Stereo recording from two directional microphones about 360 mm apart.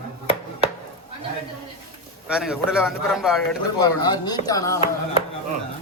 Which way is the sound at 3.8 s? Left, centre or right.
Centre.